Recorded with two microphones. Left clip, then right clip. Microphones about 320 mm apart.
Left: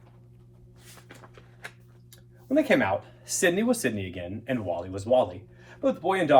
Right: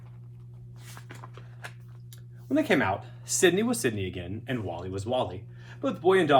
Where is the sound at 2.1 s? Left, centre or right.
Centre.